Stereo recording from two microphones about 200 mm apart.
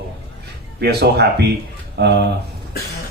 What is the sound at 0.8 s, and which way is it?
Speech, 55° right (ahead or behind).